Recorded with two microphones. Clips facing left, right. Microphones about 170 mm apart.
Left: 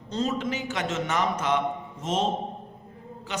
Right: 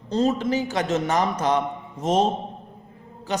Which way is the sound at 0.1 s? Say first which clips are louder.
Right 6 dB; 35° right (ahead or behind).